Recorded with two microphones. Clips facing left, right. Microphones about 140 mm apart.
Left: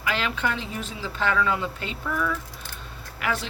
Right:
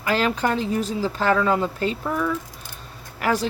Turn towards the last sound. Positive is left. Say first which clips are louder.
# right 6 dB
turn(degrees=-40)  # may be behind; listen again after turning